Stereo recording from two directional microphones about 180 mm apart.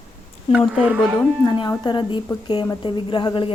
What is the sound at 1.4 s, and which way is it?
Speech, 25° left (ahead or behind).